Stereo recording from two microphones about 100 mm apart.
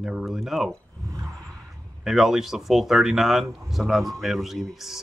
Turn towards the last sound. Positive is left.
turn(degrees=0)  # may be behind; listen again after turning